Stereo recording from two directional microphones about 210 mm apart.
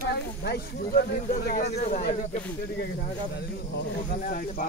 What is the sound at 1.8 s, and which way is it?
Speech, 40° left (ahead or behind).